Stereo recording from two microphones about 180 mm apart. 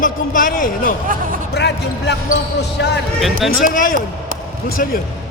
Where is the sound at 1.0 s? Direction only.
50° right (ahead or behind).